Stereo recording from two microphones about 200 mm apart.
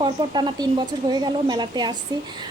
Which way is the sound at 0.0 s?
20° right (ahead or behind).